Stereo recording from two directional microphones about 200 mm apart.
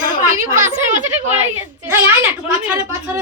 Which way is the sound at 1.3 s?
10° right (ahead or behind).